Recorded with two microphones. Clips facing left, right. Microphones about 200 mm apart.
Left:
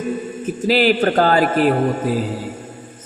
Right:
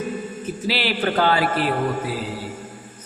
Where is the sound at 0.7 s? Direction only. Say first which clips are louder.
Left 8 dB; 45° left (ahead or behind).